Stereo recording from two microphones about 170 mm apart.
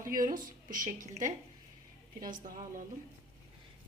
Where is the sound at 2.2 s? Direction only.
50° right (ahead or behind).